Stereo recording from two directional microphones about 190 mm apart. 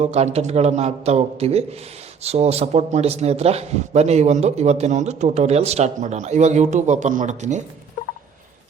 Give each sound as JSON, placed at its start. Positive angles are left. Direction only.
{"t": 0.0, "sound": "speech", "side_deg": -35}